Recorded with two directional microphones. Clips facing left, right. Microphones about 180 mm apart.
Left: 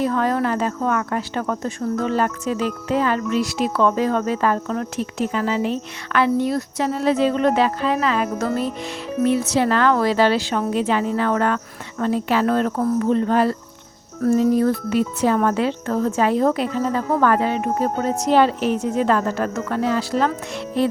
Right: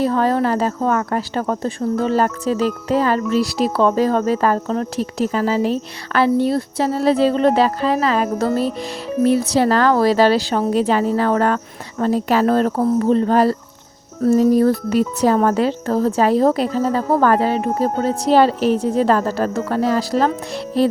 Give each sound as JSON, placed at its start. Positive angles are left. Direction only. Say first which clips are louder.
{"t": 0.0, "sound": "speech", "louder": "right 3 dB", "side_deg": -30}